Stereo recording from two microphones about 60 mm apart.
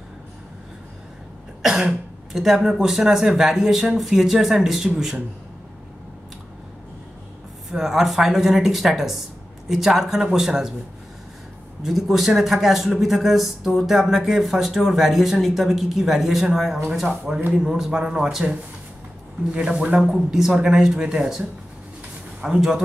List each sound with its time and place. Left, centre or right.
1.6 s speech: centre
7.7 s speech: centre
11.8 s a man's voice: centre